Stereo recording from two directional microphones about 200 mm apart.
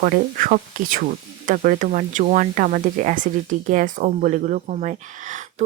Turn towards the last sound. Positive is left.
turn(degrees=-40)  # may be behind; listen again after turning